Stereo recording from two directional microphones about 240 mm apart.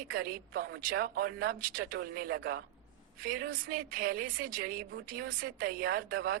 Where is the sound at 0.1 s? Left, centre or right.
Right.